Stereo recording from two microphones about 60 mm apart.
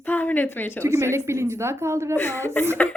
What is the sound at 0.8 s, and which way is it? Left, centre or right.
Speech, right.